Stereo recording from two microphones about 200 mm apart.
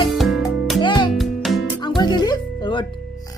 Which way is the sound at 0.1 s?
Centre (ahead or behind).